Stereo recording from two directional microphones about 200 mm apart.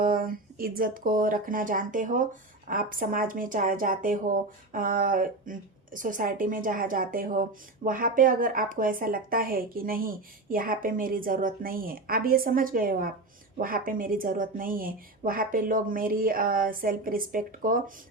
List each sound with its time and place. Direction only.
0.0 s speech: 45° right (ahead or behind)